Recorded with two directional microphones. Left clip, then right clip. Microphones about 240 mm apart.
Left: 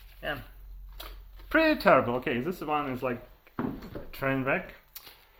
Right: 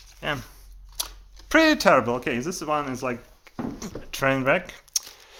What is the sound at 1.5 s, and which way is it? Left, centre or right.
Speech, right.